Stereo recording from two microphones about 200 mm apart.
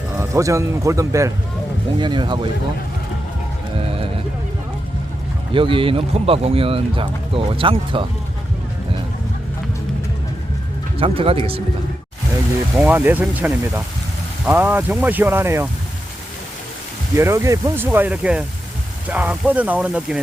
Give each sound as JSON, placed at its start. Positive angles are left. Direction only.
{"t": 0.2, "sound": "speech", "side_deg": -15}
{"t": 3.8, "sound": "music", "side_deg": -30}
{"t": 5.5, "sound": "speech", "side_deg": -25}
{"t": 10.9, "sound": "speech", "side_deg": -30}
{"t": 12.7, "sound": "speech", "side_deg": -10}
{"t": 17.2, "sound": "speech", "side_deg": -15}